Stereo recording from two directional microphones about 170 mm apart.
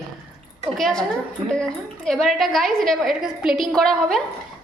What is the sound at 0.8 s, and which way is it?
Speech, 5° left (ahead or behind).